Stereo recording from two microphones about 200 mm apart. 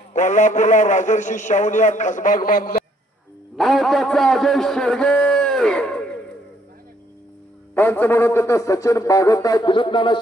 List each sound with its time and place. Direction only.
0.1 s a man's voice: 40° left (ahead or behind)
3.5 s a man's voice: centre (ahead or behind)
7.7 s speech: 10° left (ahead or behind)